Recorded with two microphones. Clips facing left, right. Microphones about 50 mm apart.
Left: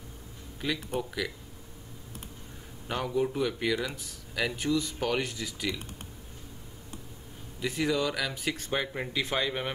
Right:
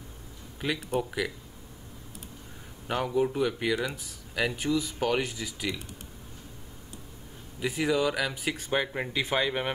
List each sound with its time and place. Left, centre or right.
0.6 s speech: centre
2.9 s speech: centre
7.6 s speech: centre